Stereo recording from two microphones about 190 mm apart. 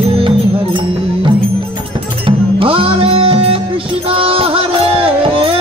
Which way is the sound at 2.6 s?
30° right (ahead or behind).